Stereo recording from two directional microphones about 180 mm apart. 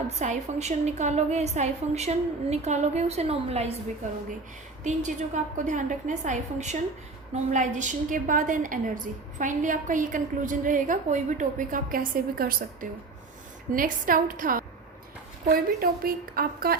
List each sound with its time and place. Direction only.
0.2 s a woman's voice: 40° right (ahead or behind)
4.8 s a woman's voice: 45° right (ahead or behind)